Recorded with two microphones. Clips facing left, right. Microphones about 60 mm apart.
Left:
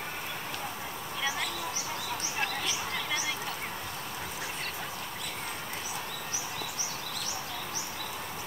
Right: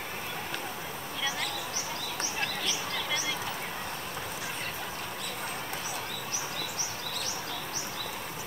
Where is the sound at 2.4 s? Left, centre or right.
Centre.